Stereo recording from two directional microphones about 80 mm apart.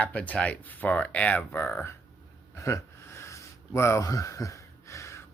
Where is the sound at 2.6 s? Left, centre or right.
Left.